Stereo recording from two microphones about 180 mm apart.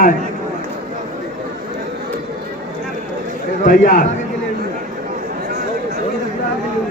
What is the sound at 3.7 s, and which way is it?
Speech, 50° left (ahead or behind).